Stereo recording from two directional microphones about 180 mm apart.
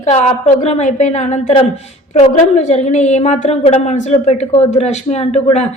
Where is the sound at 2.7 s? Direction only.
40° left (ahead or behind).